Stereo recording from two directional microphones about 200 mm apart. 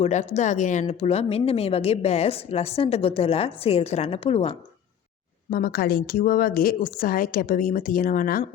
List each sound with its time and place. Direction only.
0.0 s speech: 35° left (ahead or behind)
5.5 s a woman's voice: 45° left (ahead or behind)